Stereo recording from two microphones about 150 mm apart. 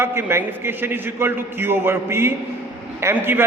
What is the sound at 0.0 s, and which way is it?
A man's voice, 15° right (ahead or behind).